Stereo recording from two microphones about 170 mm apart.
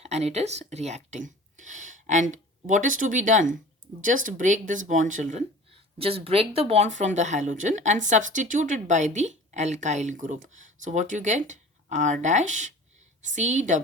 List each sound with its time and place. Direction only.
0.0 s speech: 40° right (ahead or behind)